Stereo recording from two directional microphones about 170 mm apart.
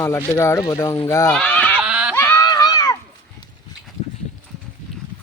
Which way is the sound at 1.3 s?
5° left (ahead or behind).